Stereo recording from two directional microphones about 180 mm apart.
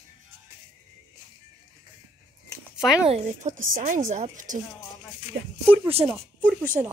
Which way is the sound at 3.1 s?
40° right (ahead or behind).